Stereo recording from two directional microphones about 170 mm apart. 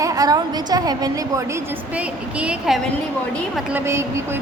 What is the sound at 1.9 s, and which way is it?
A woman's voice, 5° right (ahead or behind).